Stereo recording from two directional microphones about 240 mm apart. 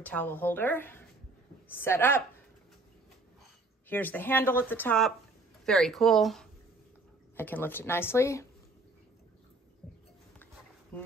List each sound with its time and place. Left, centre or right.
0.0 s speech: centre
3.9 s speech: centre
10.9 s speech: centre